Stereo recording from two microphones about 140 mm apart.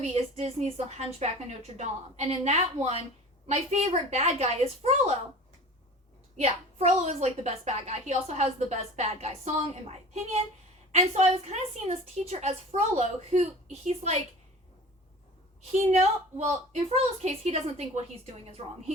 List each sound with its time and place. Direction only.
0.0 s a woman's voice: 50° right (ahead or behind)
6.3 s a woman's voice: 50° right (ahead or behind)
10.9 s a woman's voice: 55° right (ahead or behind)
15.7 s a woman's voice: 50° right (ahead or behind)